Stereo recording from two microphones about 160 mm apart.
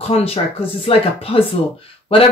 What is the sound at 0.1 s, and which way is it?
Speech, 40° left (ahead or behind).